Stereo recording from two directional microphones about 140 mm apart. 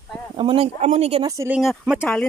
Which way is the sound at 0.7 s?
50° right (ahead or behind).